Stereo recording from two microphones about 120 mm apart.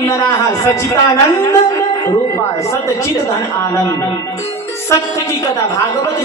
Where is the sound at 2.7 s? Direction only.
25° left (ahead or behind).